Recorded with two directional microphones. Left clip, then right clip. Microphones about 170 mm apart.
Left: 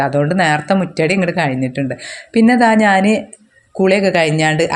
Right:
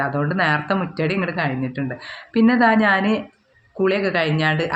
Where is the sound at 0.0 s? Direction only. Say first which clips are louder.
Left 6 dB; 35° left (ahead or behind).